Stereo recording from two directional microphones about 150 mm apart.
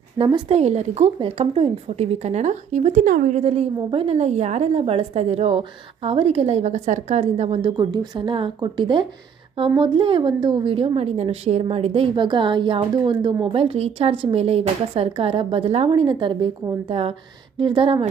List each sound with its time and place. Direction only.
0.2 s a woman's voice: 35° right (ahead or behind)
0.5 s a woman's voice: 45° right (ahead or behind); by 3.4 s 60° right (ahead or behind)
3.4 s a woman's voice: 40° right (ahead or behind)
7.8 s a woman's voice: 30° right (ahead or behind)